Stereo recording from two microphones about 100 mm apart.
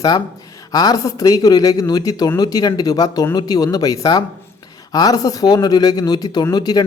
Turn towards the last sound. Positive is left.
turn(degrees=40)  # may be behind; listen again after turning